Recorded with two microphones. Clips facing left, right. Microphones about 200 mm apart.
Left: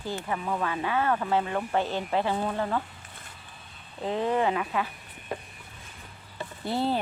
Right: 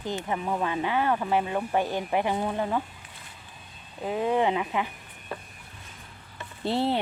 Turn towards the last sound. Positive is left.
turn(degrees=-25)  # may be behind; listen again after turning